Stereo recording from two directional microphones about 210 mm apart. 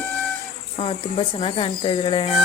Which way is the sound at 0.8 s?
25° left (ahead or behind).